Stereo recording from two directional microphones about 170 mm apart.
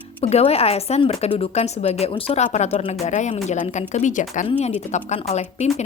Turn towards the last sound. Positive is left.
turn(degrees=40)  # may be behind; listen again after turning